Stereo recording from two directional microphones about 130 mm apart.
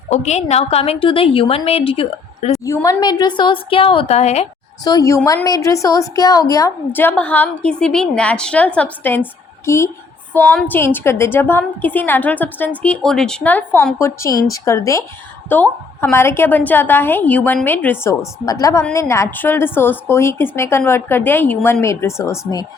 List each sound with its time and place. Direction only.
0.1 s a woman's voice: 60° left (ahead or behind)
2.6 s a woman's voice: 30° left (ahead or behind); by 4.4 s 55° left (ahead or behind)
4.8 s a woman's voice: 30° left (ahead or behind)
6.9 s a woman's voice: 15° left (ahead or behind)